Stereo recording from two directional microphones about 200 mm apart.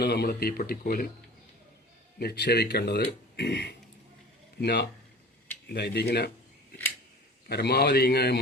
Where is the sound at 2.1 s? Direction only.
55° left (ahead or behind).